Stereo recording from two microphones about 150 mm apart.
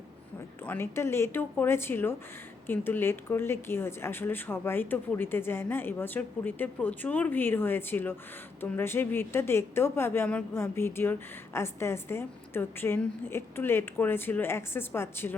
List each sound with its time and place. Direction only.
0.6 s a woman's voice: 15° left (ahead or behind)